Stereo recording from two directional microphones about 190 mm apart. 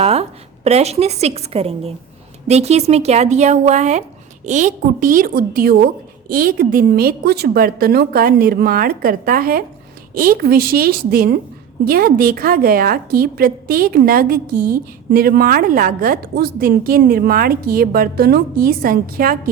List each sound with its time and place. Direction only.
0.0 s a woman's voice: 30° right (ahead or behind); by 19.4 s 50° right (ahead or behind)